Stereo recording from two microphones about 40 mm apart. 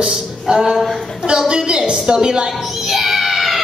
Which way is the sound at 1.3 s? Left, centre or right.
Right.